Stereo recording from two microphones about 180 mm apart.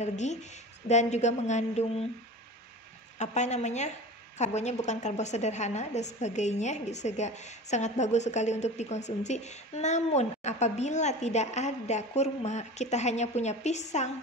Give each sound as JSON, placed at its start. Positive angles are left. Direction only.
{"t": 0.0, "sound": "a woman's voice", "side_deg": 40}
{"t": 3.2, "sound": "a woman's voice", "side_deg": 40}